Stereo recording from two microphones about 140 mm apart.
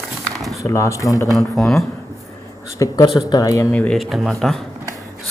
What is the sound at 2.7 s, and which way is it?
Speech, 20° left (ahead or behind).